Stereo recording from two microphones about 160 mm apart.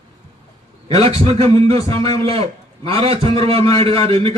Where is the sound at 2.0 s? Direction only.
40° right (ahead or behind).